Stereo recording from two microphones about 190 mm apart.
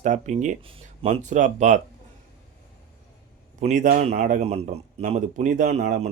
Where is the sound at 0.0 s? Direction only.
40° right (ahead or behind).